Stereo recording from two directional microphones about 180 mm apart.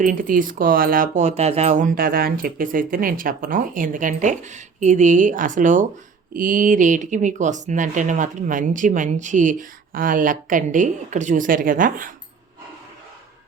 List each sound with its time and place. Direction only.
0.0 s speech: 50° right (ahead or behind)